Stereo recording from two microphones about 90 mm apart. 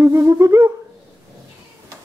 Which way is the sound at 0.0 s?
30° right (ahead or behind).